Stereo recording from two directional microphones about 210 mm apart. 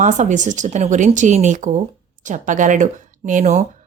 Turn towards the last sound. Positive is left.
turn(degrees=-35)  # may be behind; listen again after turning